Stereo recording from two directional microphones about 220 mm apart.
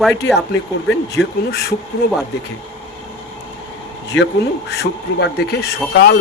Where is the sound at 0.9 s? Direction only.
50° left (ahead or behind).